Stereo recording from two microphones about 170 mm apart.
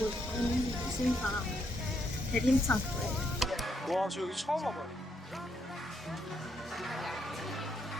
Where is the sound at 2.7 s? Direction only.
5° left (ahead or behind).